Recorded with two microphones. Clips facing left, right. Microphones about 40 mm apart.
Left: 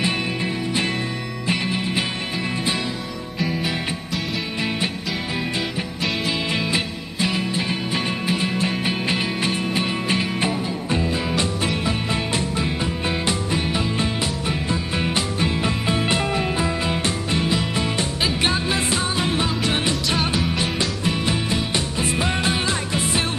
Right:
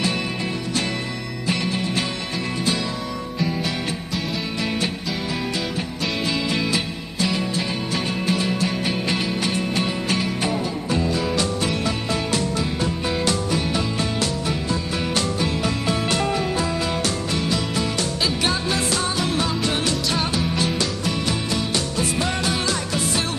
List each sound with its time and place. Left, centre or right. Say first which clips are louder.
1.5 s music: even; left
4.6 s music: even; left
6.5 s music: even; left